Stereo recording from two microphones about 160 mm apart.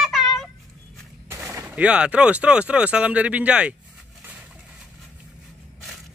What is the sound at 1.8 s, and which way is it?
Speech, 5° right (ahead or behind).